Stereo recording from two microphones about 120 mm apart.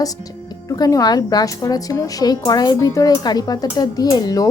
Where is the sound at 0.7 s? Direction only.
30° left (ahead or behind).